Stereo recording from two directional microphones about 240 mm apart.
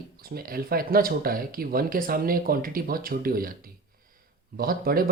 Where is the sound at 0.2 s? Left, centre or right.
Right.